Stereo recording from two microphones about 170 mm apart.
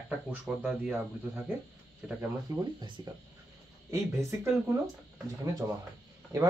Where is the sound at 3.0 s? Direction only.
25° right (ahead or behind).